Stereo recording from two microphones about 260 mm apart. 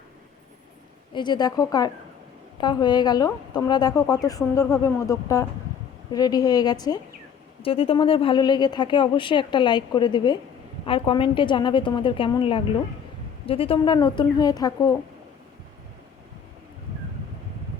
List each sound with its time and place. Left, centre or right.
1.1 s a woman's voice: centre